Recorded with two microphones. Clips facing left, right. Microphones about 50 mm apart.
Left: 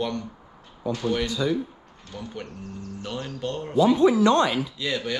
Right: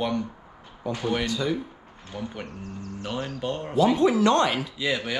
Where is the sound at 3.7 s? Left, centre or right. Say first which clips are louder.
Left 2 dB; right.